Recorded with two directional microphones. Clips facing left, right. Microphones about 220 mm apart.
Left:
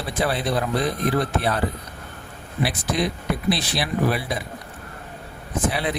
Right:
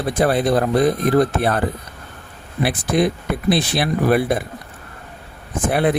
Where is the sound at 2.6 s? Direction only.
55° right (ahead or behind).